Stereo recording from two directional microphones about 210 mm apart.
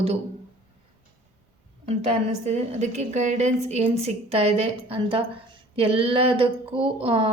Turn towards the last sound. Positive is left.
turn(degrees=-25)  # may be behind; listen again after turning